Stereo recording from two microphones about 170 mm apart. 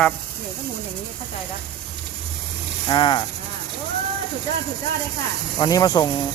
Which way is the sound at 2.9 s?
30° left (ahead or behind).